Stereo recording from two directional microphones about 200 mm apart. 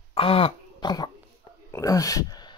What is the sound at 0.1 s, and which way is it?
Speech, 30° left (ahead or behind).